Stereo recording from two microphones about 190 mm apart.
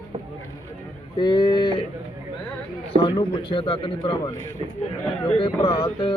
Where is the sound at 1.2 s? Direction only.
25° left (ahead or behind).